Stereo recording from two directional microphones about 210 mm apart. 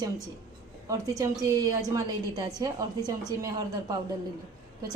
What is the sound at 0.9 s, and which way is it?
A woman's voice, 15° right (ahead or behind).